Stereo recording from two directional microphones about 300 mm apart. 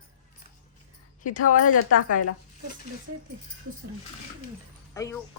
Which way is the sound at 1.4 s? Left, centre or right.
Left.